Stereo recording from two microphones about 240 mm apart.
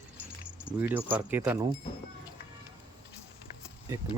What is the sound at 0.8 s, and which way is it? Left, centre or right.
Speech, centre.